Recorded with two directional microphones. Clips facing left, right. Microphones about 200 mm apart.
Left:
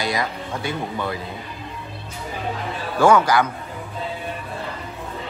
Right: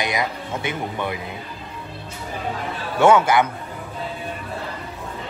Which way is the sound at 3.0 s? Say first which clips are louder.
Right 1 dB; 25° right (ahead or behind).